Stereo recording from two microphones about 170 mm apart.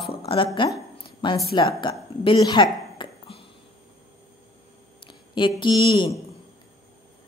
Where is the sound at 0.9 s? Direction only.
30° left (ahead or behind).